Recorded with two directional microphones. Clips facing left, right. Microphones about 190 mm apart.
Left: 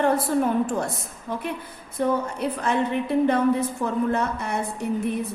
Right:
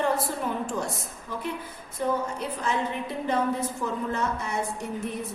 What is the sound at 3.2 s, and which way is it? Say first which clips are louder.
A woman's voice: left 3 dB; 60° left (ahead or behind).